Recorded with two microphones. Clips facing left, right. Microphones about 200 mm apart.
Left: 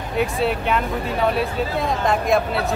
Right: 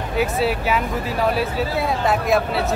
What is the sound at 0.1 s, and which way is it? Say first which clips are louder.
Speech: even; 5° right (ahead or behind).